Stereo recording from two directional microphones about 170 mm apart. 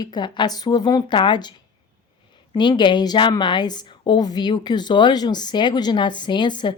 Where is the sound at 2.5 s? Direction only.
25° left (ahead or behind).